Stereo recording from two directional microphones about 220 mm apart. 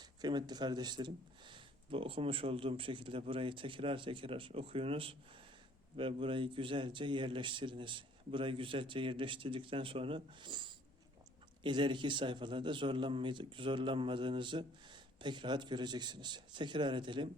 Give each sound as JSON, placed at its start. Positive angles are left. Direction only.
{"t": 0.0, "sound": "a man's voice", "side_deg": -20}